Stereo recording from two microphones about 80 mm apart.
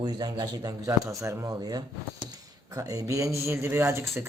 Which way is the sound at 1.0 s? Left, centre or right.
Right.